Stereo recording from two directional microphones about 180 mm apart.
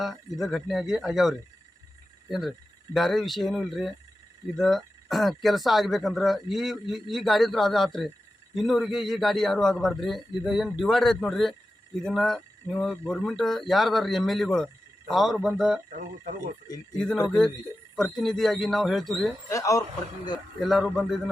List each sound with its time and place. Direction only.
0.0 s speech: centre (ahead or behind)
2.9 s speech: centre (ahead or behind)
15.9 s speech: 45° right (ahead or behind)
17.2 s speech: 5° left (ahead or behind)
19.5 s speech: 20° left (ahead or behind)
20.6 s speech: centre (ahead or behind)